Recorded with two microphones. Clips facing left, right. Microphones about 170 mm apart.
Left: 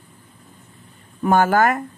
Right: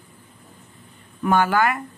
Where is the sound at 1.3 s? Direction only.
45° left (ahead or behind).